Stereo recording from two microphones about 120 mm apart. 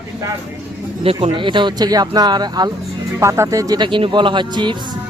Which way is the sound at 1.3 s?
40° right (ahead or behind).